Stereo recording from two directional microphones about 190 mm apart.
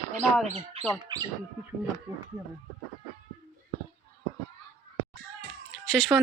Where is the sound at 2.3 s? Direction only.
15° right (ahead or behind).